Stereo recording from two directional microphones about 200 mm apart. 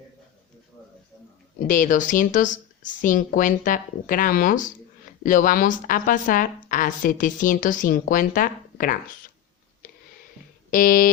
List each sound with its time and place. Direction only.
1.6 s a woman's voice: 40° left (ahead or behind)
10.7 s speech: 45° left (ahead or behind)